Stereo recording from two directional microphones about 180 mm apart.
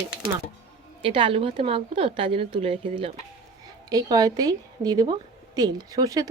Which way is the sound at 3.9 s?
20° right (ahead or behind).